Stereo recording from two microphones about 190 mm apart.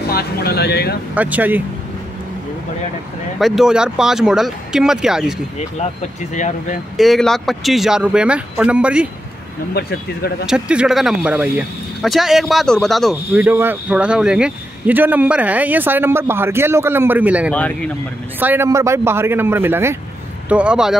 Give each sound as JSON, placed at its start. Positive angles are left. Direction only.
{"t": 0.1, "sound": "speech", "side_deg": 55}
{"t": 1.1, "sound": "speech", "side_deg": -10}
{"t": 3.3, "sound": "speech", "side_deg": 0}
{"t": 6.3, "sound": "speech", "side_deg": 40}
{"t": 7.0, "sound": "speech", "side_deg": 0}
{"t": 9.8, "sound": "speech", "side_deg": 55}
{"t": 10.4, "sound": "speech", "side_deg": -5}
{"t": 17.5, "sound": "speech", "side_deg": 5}
{"t": 18.4, "sound": "speech", "side_deg": -10}